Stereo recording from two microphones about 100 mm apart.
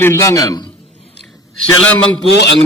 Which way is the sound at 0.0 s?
30° left (ahead or behind).